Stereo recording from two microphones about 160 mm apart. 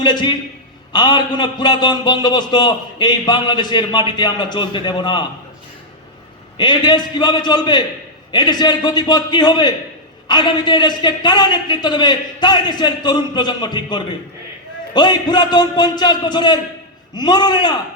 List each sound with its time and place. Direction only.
0.0 s a man's voice: 25° left (ahead or behind)
6.6 s a man's voice: 30° left (ahead or behind)